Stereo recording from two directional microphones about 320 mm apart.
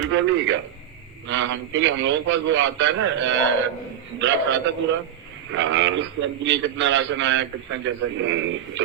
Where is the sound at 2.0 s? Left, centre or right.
Right.